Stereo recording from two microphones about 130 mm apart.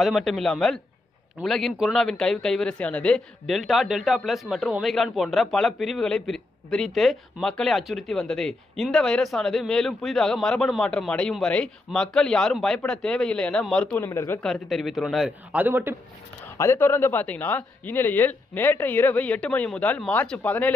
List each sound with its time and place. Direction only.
0.0 s a man's voice: centre (ahead or behind)
14.0 s speech: 20° left (ahead or behind)
14.4 s a man's voice: centre (ahead or behind)
15.5 s a man's voice: 15° right (ahead or behind)
16.4 s speech: 20° left (ahead or behind)